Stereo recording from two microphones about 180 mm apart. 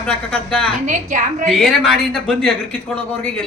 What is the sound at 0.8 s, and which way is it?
Speech, 45° right (ahead or behind).